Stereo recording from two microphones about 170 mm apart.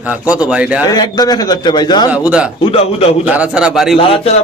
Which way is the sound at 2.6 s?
35° left (ahead or behind).